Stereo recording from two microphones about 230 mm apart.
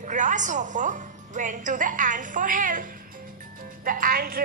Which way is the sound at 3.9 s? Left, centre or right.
Right.